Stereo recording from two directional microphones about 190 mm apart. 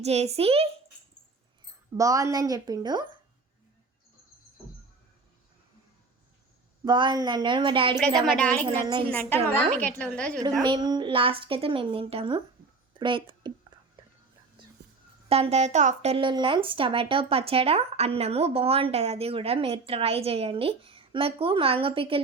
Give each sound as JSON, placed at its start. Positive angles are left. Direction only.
{"t": 0.0, "sound": "speech", "side_deg": -35}
{"t": 2.0, "sound": "a woman's voice", "side_deg": -15}
{"t": 6.8, "sound": "a woman's voice", "side_deg": -25}
{"t": 8.3, "sound": "a woman's voice", "side_deg": 5}
{"t": 8.6, "sound": "a woman's voice", "side_deg": -25}
{"t": 9.1, "sound": "a woman's voice", "side_deg": 10}
{"t": 10.6, "sound": "a woman's voice", "side_deg": -20}
{"t": 12.9, "sound": "a sound", "side_deg": -25}
{"t": 15.3, "sound": "speech", "side_deg": -35}